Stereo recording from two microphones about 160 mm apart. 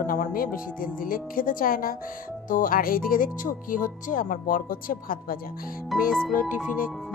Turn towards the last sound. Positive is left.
turn(degrees=0)  # may be behind; listen again after turning